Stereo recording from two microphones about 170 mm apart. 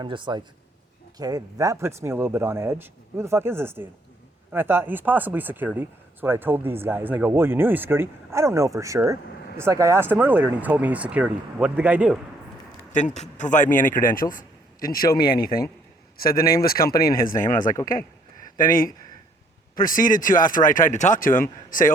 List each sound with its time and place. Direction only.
0.0 s a man's voice: 30° right (ahead or behind); by 12.2 s 5° right (ahead or behind)
12.9 s a man's voice: 45° left (ahead or behind)